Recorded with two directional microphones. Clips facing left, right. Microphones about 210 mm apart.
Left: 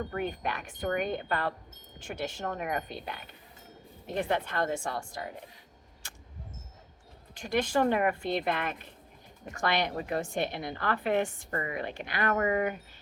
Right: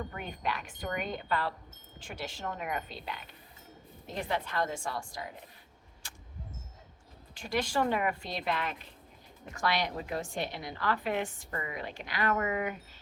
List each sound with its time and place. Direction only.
0.0 s a woman's voice: 55° left (ahead or behind)
7.5 s a woman's voice: 50° left (ahead or behind)